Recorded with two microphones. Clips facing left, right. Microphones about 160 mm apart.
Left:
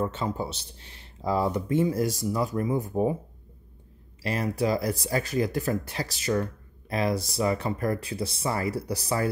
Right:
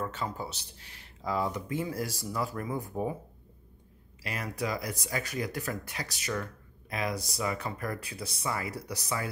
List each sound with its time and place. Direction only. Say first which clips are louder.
0.0 s speech: left 6 dB; 25° left (ahead or behind)
4.2 s speech: left 8 dB; 30° left (ahead or behind)